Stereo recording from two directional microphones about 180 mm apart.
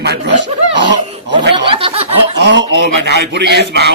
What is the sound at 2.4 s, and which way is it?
Speech, 75° right (ahead or behind).